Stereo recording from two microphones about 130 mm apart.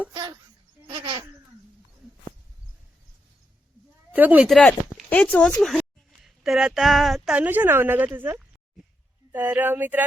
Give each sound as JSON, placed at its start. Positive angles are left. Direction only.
{"t": 0.1, "sound": "speech", "side_deg": -30}
{"t": 0.9, "sound": "speech", "side_deg": -45}
{"t": 4.1, "sound": "speech", "side_deg": -10}
{"t": 4.4, "sound": "speech", "side_deg": 0}
{"t": 5.0, "sound": "a sound", "side_deg": 10}
{"t": 6.7, "sound": "speech", "side_deg": 0}